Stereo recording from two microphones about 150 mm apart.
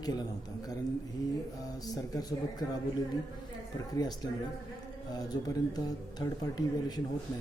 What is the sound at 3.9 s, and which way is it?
Speech, 25° left (ahead or behind).